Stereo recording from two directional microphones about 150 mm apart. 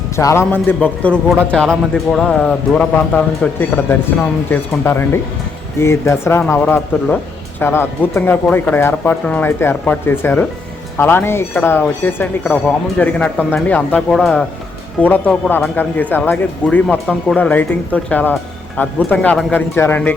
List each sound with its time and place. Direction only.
0.2 s a man's voice: 20° left (ahead or behind)